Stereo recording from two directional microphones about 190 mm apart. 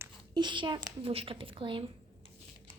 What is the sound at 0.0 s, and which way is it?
A woman's voice, 20° right (ahead or behind).